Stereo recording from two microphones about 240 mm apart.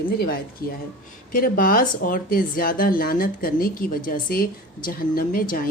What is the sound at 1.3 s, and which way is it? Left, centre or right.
Speech, left.